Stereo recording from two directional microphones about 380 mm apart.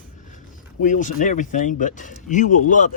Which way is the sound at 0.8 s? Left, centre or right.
Centre.